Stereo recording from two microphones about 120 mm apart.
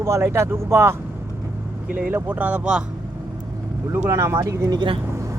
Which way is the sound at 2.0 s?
15° right (ahead or behind).